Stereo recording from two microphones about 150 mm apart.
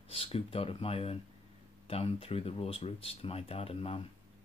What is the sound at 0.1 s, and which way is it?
Speech, 40° left (ahead or behind).